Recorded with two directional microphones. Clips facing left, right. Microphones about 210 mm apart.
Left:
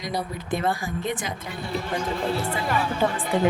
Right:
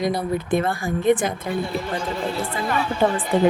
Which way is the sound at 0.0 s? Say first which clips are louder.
Right 7 dB; 55° right (ahead or behind).